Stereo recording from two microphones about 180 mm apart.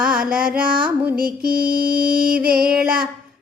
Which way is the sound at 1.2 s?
55° right (ahead or behind).